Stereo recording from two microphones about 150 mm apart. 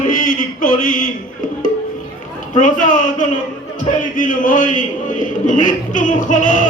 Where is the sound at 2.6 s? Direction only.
60° left (ahead or behind).